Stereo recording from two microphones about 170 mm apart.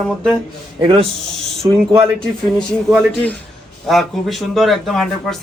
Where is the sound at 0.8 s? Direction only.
30° right (ahead or behind).